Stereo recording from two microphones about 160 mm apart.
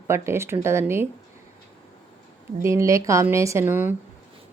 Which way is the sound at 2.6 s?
20° right (ahead or behind).